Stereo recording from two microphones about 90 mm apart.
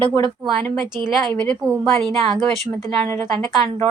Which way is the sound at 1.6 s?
30° right (ahead or behind).